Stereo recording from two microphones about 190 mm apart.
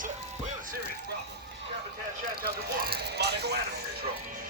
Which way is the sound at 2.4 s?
55° right (ahead or behind).